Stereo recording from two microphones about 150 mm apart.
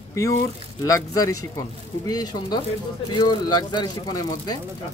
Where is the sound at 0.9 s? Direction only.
25° left (ahead or behind).